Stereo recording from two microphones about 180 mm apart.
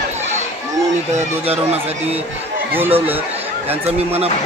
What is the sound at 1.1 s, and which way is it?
Speech, 35° right (ahead or behind).